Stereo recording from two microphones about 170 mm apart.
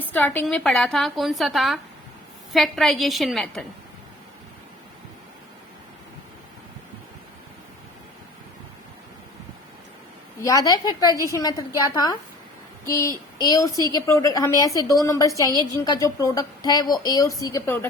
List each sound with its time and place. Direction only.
0.0 s a woman's voice: 10° left (ahead or behind)
10.4 s a woman's voice: 20° left (ahead or behind)